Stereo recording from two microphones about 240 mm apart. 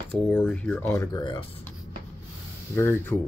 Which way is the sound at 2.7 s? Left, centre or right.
Centre.